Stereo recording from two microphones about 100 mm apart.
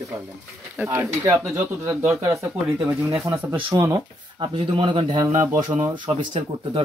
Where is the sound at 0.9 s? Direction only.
25° right (ahead or behind).